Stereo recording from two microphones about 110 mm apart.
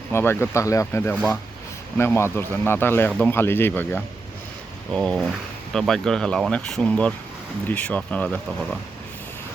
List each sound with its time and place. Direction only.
0.1 s a man's voice: 20° left (ahead or behind)
4.9 s speech: 5° left (ahead or behind)